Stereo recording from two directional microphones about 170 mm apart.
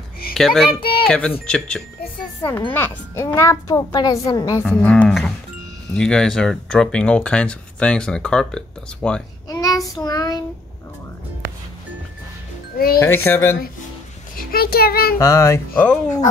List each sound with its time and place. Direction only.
0.3 s a child's voice: centre (ahead or behind); by 4.6 s 20° left (ahead or behind)
4.6 s speech: 5° left (ahead or behind)
9.5 s child singing: 20° left (ahead or behind)
12.7 s a child's voice: 60° left (ahead or behind)
13.0 s a child's voice: 15° left (ahead or behind)
14.5 s a child's voice: 65° left (ahead or behind)
15.1 s a child's voice: 15° left (ahead or behind)